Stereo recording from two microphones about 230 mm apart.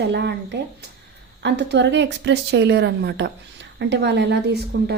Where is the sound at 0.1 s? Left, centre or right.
Right.